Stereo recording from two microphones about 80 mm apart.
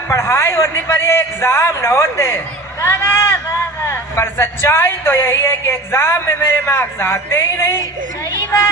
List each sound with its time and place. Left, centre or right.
0.1 s a woman's voice: left
2.8 s a sound: left
3.8 s a woman's voice: left